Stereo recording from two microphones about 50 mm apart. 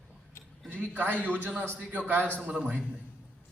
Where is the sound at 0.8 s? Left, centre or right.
Right.